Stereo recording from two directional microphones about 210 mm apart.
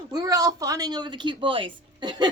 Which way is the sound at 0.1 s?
15° right (ahead or behind).